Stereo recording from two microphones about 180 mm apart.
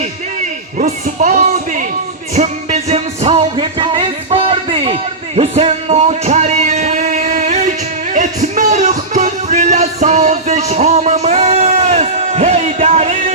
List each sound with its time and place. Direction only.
0.0 s music: 40° right (ahead or behind)
2.3 s music: 40° right (ahead or behind)